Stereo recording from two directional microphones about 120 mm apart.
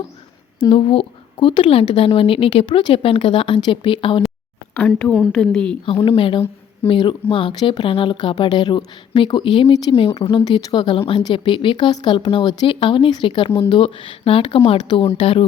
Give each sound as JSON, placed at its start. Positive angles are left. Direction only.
{"t": 0.6, "sound": "a woman's voice", "side_deg": 50}
{"t": 5.3, "sound": "a woman's voice", "side_deg": 5}
{"t": 5.8, "sound": "a woman's voice", "side_deg": 50}